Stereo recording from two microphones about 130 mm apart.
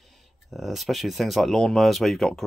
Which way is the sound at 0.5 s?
Centre (ahead or behind).